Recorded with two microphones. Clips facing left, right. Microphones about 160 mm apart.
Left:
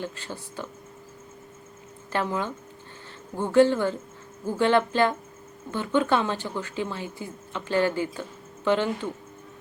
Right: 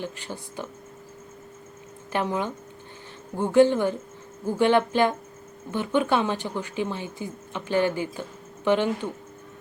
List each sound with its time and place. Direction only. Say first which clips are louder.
0.0 s speech: right 1 dB; 15° right (ahead or behind)
2.1 s speech: right 1 dB; 15° right (ahead or behind)